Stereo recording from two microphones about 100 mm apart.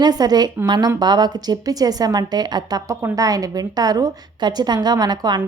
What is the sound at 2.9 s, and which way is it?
A woman's voice, 35° right (ahead or behind).